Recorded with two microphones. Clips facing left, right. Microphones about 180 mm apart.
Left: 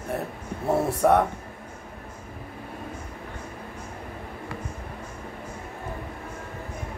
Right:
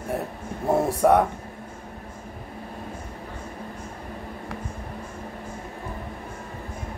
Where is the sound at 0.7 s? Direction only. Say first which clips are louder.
Right 2 dB; 15° right (ahead or behind).